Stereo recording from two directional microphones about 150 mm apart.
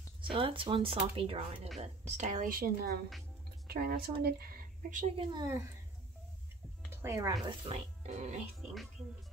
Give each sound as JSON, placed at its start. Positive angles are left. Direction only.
{"t": 0.2, "sound": "a woman's voice", "side_deg": -35}
{"t": 2.6, "sound": "a woman's voice", "side_deg": -90}
{"t": 5.1, "sound": "speech", "side_deg": -30}
{"t": 6.9, "sound": "speech", "side_deg": -20}
{"t": 7.4, "sound": "speech", "side_deg": -40}
{"t": 8.1, "sound": "speech", "side_deg": -55}